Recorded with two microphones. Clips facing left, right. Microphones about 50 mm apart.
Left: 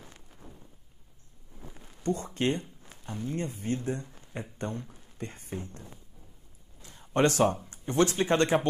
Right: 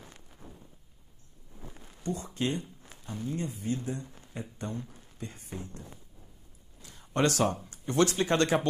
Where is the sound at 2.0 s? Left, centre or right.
Left.